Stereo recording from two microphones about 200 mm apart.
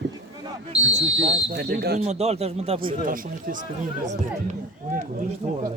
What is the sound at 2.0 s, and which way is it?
Speech, 30° right (ahead or behind).